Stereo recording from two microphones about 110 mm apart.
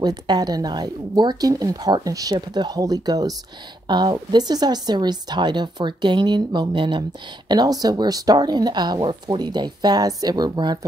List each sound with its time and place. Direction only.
0.0 s speech: 40° right (ahead or behind)